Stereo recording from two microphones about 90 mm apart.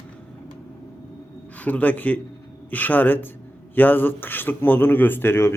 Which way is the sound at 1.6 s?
15° left (ahead or behind).